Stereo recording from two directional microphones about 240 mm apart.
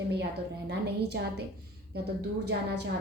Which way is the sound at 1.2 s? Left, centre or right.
Right.